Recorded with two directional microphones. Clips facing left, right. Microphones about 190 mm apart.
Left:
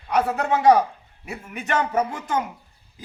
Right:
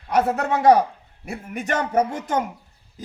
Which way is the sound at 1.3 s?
45° right (ahead or behind).